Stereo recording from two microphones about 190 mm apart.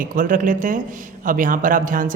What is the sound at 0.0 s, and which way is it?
Speech, 45° right (ahead or behind).